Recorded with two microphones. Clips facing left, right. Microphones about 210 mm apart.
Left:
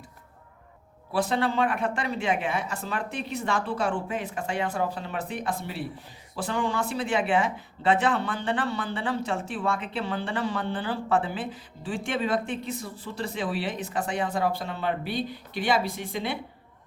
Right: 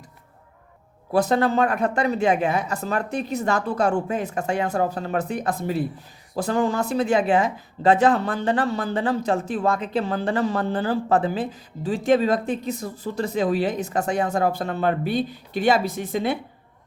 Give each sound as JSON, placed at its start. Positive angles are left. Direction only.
{"t": 1.1, "sound": "speech", "side_deg": -40}